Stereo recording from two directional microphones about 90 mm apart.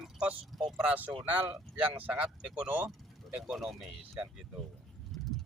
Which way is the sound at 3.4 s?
Centre (ahead or behind).